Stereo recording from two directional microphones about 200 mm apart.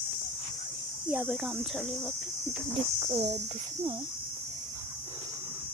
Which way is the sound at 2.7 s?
25° right (ahead or behind).